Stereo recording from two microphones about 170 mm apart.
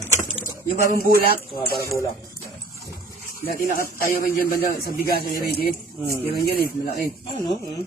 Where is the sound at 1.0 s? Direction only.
60° right (ahead or behind).